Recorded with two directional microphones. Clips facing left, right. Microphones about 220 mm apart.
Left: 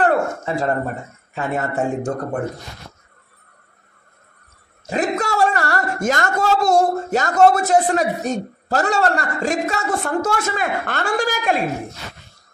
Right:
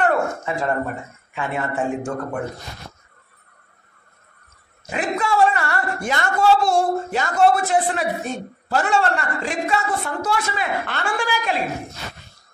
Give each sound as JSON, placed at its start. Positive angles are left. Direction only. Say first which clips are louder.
{"t": 0.0, "sound": "speech", "louder": "left 2 dB", "side_deg": 35}
{"t": 4.8, "sound": "a man's voice", "louder": "left 3 dB", "side_deg": 40}